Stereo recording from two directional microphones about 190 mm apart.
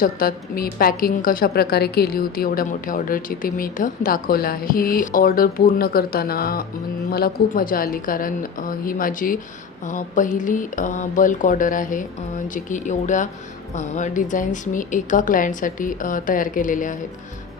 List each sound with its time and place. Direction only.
0.0 s a woman's voice: 50° left (ahead or behind)